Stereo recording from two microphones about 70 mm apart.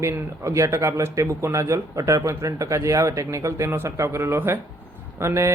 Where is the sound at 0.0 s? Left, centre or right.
Right.